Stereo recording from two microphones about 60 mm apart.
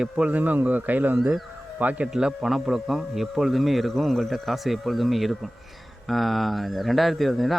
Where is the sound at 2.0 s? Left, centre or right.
Centre.